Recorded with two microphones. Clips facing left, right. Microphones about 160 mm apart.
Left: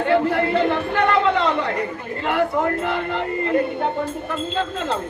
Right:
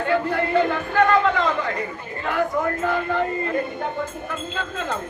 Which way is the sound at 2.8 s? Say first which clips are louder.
Right 1 dB; 20° left (ahead or behind).